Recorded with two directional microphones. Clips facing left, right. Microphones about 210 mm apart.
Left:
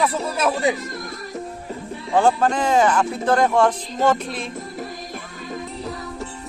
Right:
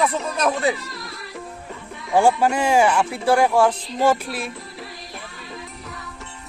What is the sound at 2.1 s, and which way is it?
Speech, 10° right (ahead or behind).